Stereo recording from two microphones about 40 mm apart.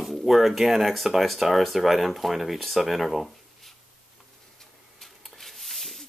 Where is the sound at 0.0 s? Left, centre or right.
Centre.